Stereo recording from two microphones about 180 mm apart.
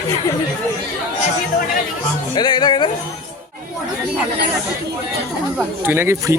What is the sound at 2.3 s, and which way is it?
Speech, 25° left (ahead or behind).